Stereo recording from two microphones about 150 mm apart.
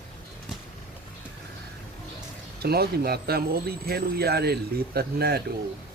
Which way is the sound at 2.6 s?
90° right.